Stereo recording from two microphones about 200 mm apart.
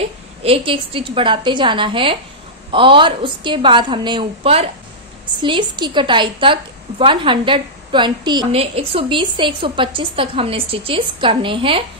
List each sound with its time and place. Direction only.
0.4 s a woman's voice: 25° right (ahead or behind)